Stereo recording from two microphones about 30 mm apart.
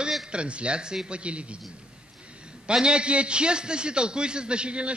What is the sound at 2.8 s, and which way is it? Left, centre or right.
A man's voice, right.